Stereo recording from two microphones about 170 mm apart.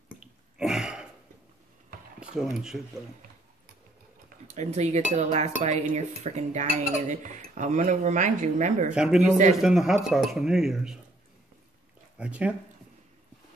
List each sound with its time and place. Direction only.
0.6 s throat clearing: 5° right (ahead or behind)
2.5 s speech: centre (ahead or behind)
4.6 s cutlery: 40° right (ahead or behind)
5.1 s dishes: 40° right (ahead or behind)
8.9 s speech: 5° right (ahead or behind)
12.2 s speech: 5° right (ahead or behind)